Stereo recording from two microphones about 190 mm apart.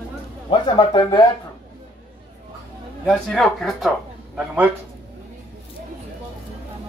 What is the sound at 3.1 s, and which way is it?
Speech, centre (ahead or behind).